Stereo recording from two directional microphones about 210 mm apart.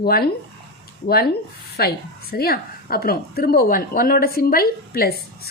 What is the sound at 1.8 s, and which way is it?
A woman's voice, 45° left (ahead or behind).